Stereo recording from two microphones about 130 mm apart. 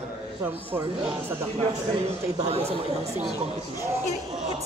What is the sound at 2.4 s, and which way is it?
Speech, 50° right (ahead or behind).